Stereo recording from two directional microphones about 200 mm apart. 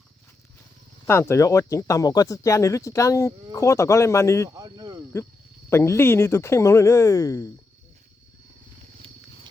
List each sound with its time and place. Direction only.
1.0 s speech: 10° left (ahead or behind)
4.5 s a sound: 20° right (ahead or behind)
5.7 s speech: 15° left (ahead or behind)
9.0 s wild animals: 30° right (ahead or behind)